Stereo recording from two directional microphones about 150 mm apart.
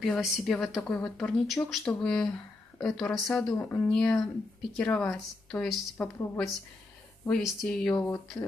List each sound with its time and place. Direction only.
0.0 s speech: centre (ahead or behind)
7.2 s speech: 5° left (ahead or behind)